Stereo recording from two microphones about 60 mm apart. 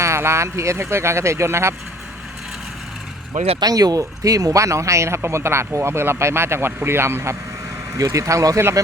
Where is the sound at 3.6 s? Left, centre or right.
Right.